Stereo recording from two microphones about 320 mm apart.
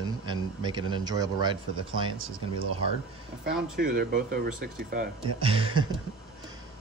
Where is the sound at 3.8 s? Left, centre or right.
Right.